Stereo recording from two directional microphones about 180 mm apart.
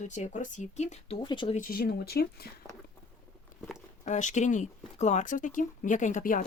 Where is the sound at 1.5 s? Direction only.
50° left (ahead or behind).